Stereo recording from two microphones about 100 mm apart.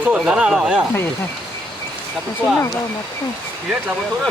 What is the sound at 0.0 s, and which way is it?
Speech, 10° right (ahead or behind).